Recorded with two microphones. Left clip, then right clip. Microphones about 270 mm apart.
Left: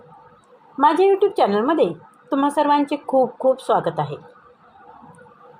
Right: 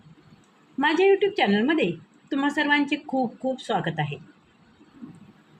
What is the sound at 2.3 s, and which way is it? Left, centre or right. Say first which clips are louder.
A woman's voice: left 6 dB; centre.